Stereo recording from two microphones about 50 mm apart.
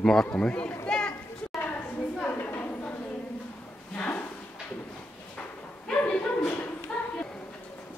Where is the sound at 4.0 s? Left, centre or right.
Left.